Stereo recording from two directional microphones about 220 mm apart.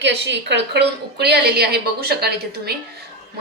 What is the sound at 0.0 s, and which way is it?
A woman's voice, 50° right (ahead or behind).